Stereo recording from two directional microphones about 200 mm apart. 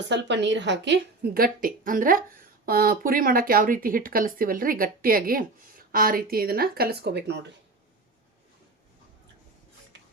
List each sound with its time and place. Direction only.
0.1 s speech: 60° right (ahead or behind)
9.9 s music: 60° right (ahead or behind)